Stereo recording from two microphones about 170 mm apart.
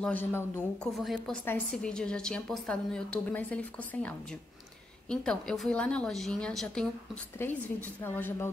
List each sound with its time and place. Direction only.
0.0 s a woman's voice: 10° left (ahead or behind)
1.0 s a woman's voice: centre (ahead or behind)